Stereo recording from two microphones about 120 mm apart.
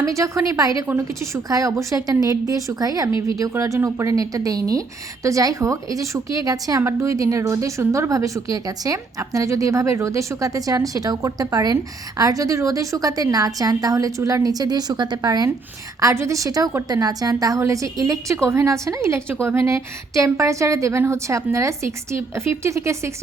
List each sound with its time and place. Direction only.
0.0 s a woman's voice: 25° right (ahead or behind)